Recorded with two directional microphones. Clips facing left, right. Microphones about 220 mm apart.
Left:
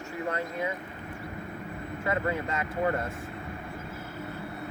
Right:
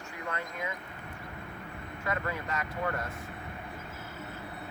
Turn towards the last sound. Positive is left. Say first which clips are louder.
# left 5 dB
turn(degrees=25)  # may be behind; listen again after turning